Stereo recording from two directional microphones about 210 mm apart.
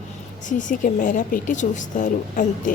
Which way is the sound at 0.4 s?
40° left (ahead or behind).